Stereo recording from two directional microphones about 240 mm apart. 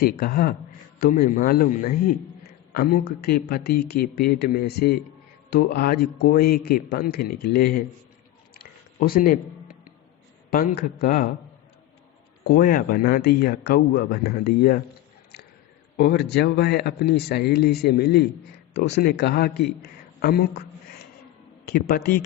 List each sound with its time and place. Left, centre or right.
0.0 s a man's voice: left
8.5 s a sound: left
10.5 s a man's voice: left
12.5 s a man's voice: left
16.0 s a man's voice: left